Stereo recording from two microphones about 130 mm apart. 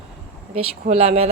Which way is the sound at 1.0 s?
50° right (ahead or behind).